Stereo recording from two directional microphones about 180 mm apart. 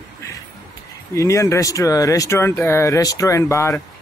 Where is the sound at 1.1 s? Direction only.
15° left (ahead or behind).